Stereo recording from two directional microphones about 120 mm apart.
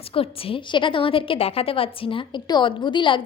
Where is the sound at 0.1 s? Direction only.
50° left (ahead or behind).